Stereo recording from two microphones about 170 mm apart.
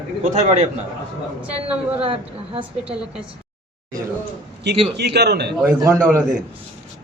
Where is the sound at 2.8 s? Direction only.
5° right (ahead or behind).